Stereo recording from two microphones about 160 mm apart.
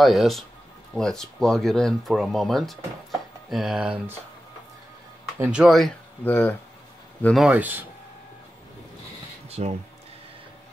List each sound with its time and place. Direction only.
0.0 s speech: centre (ahead or behind)
5.4 s speech: 5° right (ahead or behind)
6.2 s speech: 15° left (ahead or behind)
7.3 s speech: 5° right (ahead or behind)
9.5 s speech: 40° right (ahead or behind)